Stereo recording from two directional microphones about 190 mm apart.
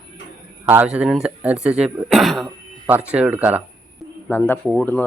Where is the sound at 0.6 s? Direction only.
10° right (ahead or behind).